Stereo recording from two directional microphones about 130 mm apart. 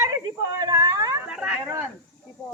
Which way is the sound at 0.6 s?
25° right (ahead or behind).